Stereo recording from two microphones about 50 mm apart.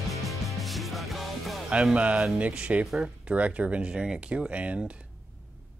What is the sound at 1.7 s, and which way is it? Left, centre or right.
Speech, centre.